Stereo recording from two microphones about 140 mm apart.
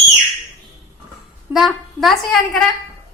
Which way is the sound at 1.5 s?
Centre (ahead or behind).